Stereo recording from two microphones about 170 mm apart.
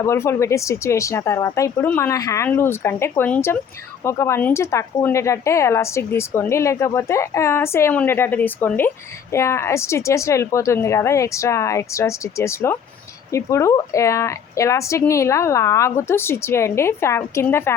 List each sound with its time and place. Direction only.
0.0 s speech: 15° left (ahead or behind)